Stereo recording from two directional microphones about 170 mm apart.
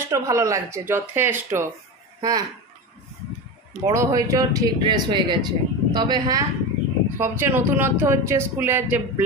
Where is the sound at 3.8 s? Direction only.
20° right (ahead or behind).